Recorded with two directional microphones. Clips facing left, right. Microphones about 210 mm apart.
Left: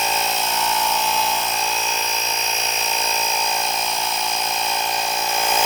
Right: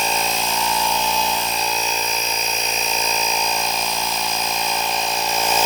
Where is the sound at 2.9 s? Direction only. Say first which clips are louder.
Right 2 dB; centre (ahead or behind).